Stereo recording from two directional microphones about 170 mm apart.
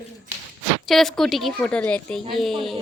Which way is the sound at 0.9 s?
Centre (ahead or behind).